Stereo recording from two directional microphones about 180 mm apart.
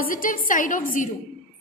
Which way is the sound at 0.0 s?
50° left (ahead or behind).